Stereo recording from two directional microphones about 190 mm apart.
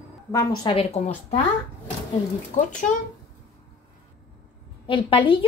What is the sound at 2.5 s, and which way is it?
Speech, 40° left (ahead or behind).